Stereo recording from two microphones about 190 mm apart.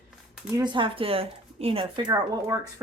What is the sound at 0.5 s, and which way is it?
Speech, 25° right (ahead or behind).